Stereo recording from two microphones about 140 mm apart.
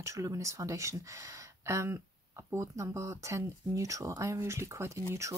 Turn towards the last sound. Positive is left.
turn(degrees=-20)  # may be behind; listen again after turning